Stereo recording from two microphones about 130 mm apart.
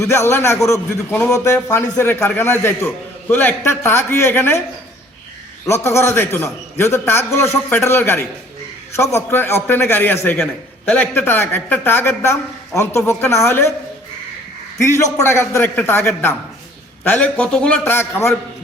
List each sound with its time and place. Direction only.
0.0 s a man's voice: 20° left (ahead or behind)
5.6 s a man's voice: 20° left (ahead or behind)
14.8 s a man's voice: 20° left (ahead or behind)